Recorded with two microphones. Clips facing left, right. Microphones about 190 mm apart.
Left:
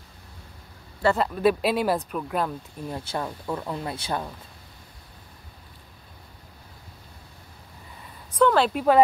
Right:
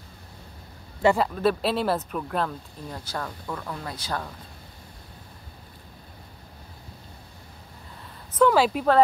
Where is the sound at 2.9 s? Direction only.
20° left (ahead or behind).